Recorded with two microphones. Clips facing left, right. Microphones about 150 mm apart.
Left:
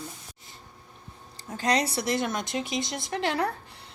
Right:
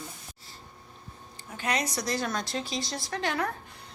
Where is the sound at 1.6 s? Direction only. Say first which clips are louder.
Left 4 dB; 30° left (ahead or behind).